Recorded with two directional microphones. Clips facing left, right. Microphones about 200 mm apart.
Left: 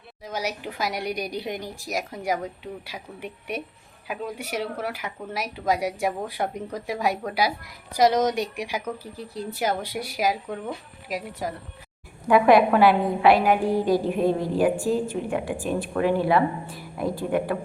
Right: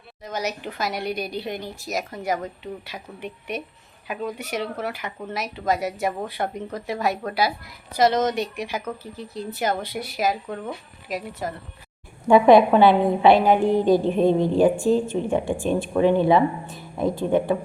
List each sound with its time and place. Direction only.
0.3 s a woman's voice: 10° left (ahead or behind)
12.3 s a woman's voice: 25° right (ahead or behind)